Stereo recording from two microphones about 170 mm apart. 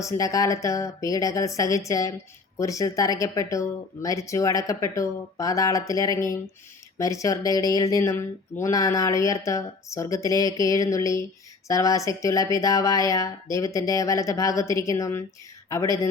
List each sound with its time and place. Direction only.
0.0 s speech: 20° left (ahead or behind)